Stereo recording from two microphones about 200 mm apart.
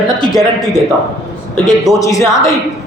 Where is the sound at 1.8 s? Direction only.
15° left (ahead or behind).